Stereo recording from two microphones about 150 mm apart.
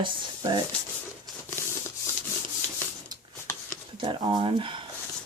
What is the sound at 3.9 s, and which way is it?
Speech, 35° right (ahead or behind).